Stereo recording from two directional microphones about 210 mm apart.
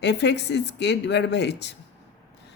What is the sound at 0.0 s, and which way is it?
Speech, 55° left (ahead or behind).